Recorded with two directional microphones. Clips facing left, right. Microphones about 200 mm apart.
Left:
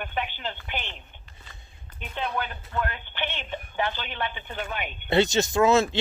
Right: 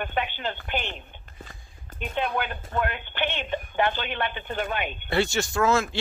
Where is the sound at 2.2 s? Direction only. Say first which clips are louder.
Right 3 dB; 60° right (ahead or behind).